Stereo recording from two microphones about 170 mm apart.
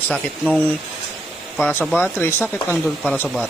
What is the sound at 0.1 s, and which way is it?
Speech, 5° left (ahead or behind).